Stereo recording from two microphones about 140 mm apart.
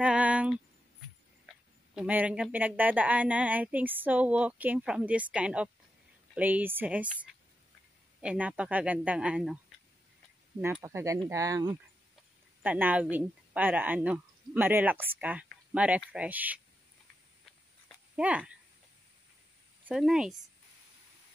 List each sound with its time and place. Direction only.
0.0 s a sound: 10° right (ahead or behind)
2.0 s a woman's voice: 10° right (ahead or behind)
10.6 s a woman's voice: 15° right (ahead or behind)
12.6 s a woman's voice: 15° right (ahead or behind)
18.1 s speech: 10° right (ahead or behind)
19.9 s speech: 5° right (ahead or behind)